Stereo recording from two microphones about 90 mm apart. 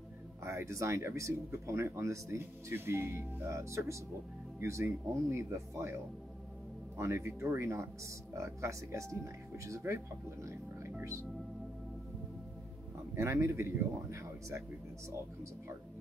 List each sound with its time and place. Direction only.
0.4 s speech: 30° right (ahead or behind)
7.0 s speech: 30° right (ahead or behind)
13.1 s speech: 30° right (ahead or behind)